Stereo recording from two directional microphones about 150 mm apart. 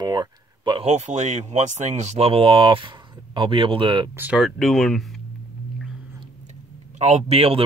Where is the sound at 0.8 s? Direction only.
50° right (ahead or behind); by 4.1 s 35° right (ahead or behind).